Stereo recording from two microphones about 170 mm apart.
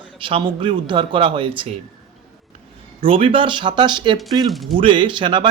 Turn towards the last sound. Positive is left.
turn(degrees=-30)  # may be behind; listen again after turning